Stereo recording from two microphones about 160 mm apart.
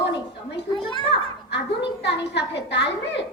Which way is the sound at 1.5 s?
90° left.